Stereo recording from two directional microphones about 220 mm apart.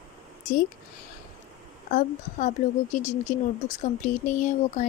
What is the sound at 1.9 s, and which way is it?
Speech, 35° left (ahead or behind).